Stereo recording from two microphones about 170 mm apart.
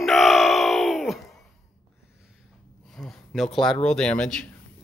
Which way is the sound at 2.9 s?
Centre (ahead or behind).